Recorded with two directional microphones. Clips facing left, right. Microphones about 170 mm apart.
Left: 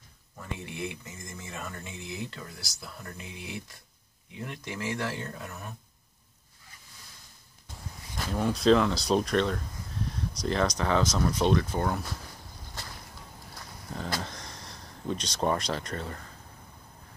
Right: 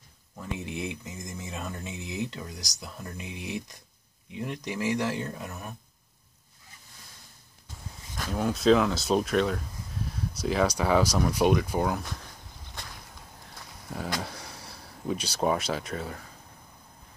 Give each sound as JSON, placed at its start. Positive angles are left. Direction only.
{"t": 0.4, "sound": "speech", "side_deg": -20}
{"t": 8.3, "sound": "speech", "side_deg": 0}
{"t": 13.8, "sound": "a sound", "side_deg": -10}
{"t": 14.2, "sound": "speech", "side_deg": -10}